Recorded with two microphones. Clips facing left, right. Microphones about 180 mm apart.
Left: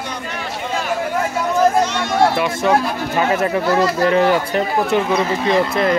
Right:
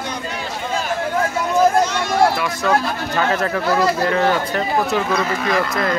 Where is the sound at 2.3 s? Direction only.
25° left (ahead or behind).